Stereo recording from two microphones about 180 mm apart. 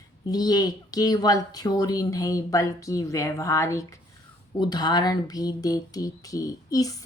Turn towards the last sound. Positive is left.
turn(degrees=20)  # may be behind; listen again after turning